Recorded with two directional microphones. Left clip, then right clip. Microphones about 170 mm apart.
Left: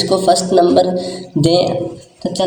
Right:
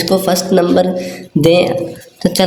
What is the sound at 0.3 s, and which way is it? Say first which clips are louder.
Speech: left 1 dB; 90° right.